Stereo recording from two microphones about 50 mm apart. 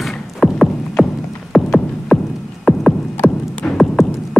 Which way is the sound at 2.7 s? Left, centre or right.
Left.